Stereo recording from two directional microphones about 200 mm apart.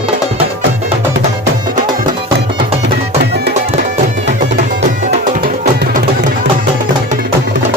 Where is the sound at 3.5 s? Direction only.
35° right (ahead or behind).